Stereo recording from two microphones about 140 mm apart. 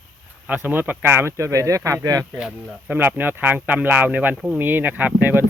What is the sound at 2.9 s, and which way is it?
Speech, 15° right (ahead or behind).